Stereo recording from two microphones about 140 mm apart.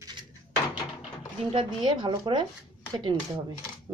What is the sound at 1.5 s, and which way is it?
Speech, 35° right (ahead or behind).